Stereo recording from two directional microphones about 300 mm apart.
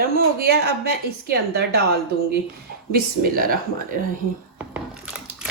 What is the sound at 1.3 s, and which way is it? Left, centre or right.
Speech, right.